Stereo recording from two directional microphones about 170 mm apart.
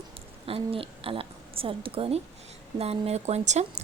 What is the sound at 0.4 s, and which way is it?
A woman's voice, 35° right (ahead or behind).